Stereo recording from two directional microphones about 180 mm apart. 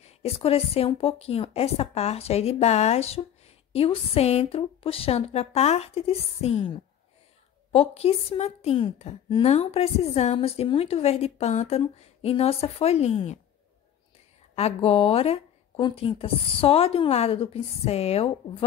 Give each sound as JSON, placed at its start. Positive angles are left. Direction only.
{"t": 0.2, "sound": "a woman's voice", "side_deg": 35}
{"t": 7.7, "sound": "a woman's voice", "side_deg": 35}
{"t": 14.5, "sound": "a woman's voice", "side_deg": 35}